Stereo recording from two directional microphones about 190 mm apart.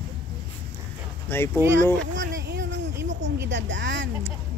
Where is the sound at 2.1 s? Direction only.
75° right (ahead or behind).